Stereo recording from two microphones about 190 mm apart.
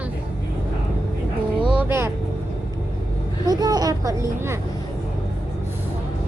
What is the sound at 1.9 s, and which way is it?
Speech, 10° right (ahead or behind).